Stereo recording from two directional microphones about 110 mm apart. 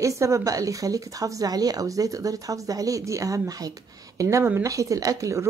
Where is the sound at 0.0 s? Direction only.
30° right (ahead or behind).